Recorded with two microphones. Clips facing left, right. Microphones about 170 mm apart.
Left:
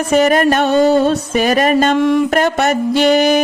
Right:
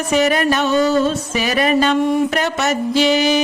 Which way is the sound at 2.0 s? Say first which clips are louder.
Left 3 dB; 90° left.